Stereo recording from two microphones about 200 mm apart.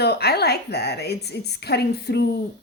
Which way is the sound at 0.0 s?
55° left (ahead or behind).